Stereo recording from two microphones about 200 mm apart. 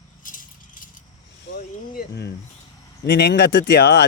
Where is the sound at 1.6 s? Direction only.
50° left (ahead or behind).